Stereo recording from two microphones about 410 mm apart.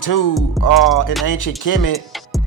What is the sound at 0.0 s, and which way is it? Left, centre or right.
Music, left.